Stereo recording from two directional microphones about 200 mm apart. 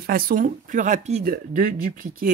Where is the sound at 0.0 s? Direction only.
45° right (ahead or behind).